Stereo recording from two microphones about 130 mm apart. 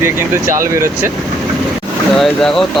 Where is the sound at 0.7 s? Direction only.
20° right (ahead or behind).